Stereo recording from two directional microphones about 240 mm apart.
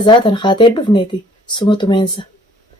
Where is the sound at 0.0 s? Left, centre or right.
Centre.